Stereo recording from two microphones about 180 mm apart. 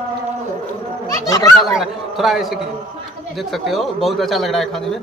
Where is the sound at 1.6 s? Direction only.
Centre (ahead or behind).